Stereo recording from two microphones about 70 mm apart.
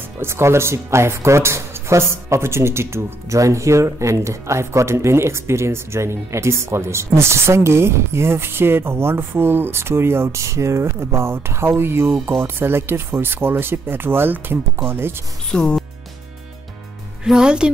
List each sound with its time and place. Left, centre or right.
0.2 s speech: right
15.5 s speech: centre
17.2 s a woman's voice: centre